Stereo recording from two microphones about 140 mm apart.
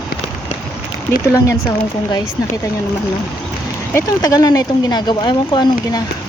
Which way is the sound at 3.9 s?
25° left (ahead or behind).